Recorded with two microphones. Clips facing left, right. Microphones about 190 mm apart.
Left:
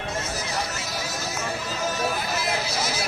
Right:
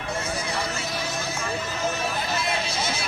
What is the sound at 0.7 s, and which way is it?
Vehicle, 30° right (ahead or behind).